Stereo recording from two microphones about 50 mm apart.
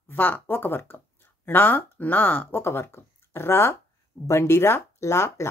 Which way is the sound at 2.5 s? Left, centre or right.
Left.